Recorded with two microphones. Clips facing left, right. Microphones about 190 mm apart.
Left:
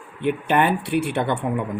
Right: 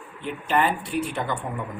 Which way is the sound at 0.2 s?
60° left (ahead or behind).